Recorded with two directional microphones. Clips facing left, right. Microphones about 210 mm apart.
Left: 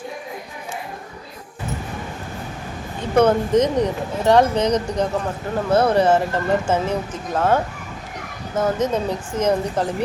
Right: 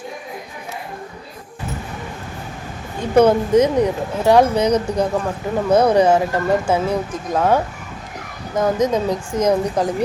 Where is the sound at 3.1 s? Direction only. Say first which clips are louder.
Right 3 dB; 10° right (ahead or behind).